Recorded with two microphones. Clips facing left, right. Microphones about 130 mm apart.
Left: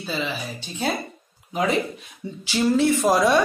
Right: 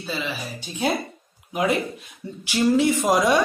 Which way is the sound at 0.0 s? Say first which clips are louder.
Left 1 dB; 5° right (ahead or behind).